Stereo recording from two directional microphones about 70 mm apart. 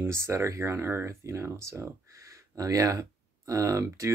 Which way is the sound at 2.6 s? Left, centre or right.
Right.